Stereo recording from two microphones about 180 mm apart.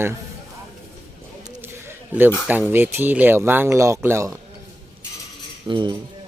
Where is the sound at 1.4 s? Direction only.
15° right (ahead or behind).